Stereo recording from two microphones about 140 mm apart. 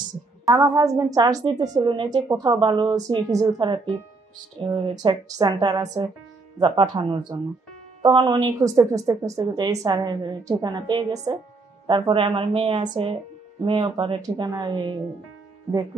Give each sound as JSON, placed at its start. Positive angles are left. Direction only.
{"t": 0.6, "sound": "a woman's voice", "side_deg": -25}